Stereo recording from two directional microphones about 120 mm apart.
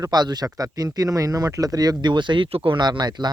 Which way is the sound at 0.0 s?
35° right (ahead or behind).